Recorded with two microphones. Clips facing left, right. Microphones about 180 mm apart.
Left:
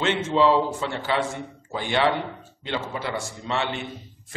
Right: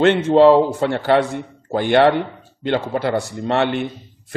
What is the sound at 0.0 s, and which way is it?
A man's voice, 60° right (ahead or behind).